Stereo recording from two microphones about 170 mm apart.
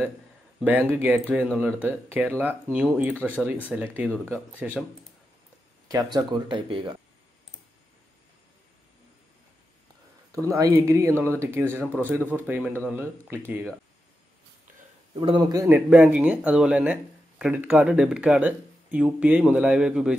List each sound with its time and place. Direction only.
0.6 s speech: 10° right (ahead or behind)
3.2 s speech: 10° left (ahead or behind)
3.6 s speech: 10° right (ahead or behind)
5.9 s speech: 20° right (ahead or behind)
10.3 s speech: 20° right (ahead or behind)
15.1 s speech: 30° right (ahead or behind); by 20.2 s 5° right (ahead or behind)